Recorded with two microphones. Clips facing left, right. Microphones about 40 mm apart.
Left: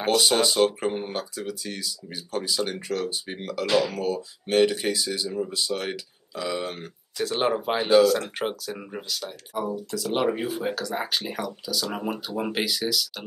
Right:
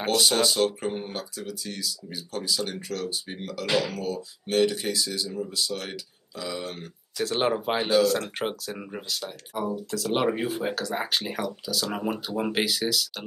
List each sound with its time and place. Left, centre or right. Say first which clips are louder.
0.0 s speech: left 2 dB; centre
3.6 s speech: left 3 dB; centre
3.9 s speech: left 3 dB; left
7.2 s speech: left 1 dB; centre